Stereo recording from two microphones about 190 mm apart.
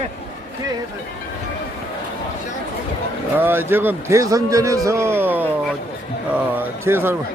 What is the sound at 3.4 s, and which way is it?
A man's voice, 10° right (ahead or behind).